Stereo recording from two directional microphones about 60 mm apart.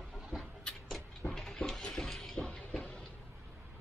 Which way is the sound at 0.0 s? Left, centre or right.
Centre.